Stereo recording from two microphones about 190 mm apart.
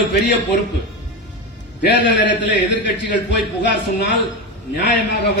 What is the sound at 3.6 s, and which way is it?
Speech, 65° left (ahead or behind).